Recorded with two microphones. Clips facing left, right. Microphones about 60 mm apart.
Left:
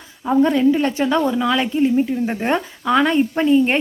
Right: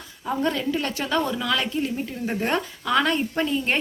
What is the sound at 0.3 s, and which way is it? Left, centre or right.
A woman's voice, centre.